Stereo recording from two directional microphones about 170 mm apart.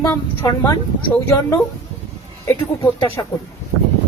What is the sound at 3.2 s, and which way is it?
Speech, 20° left (ahead or behind).